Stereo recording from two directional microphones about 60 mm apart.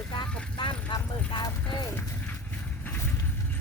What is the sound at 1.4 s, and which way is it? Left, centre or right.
Speech, left.